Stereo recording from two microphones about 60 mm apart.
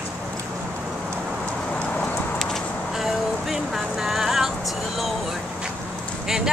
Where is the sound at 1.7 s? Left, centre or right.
Centre.